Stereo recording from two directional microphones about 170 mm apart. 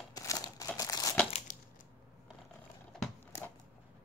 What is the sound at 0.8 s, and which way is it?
Crumpling, 20° left (ahead or behind).